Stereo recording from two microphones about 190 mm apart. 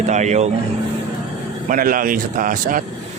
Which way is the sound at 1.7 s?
45° right (ahead or behind).